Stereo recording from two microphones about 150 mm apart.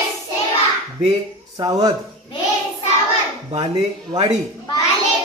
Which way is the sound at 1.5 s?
25° right (ahead or behind).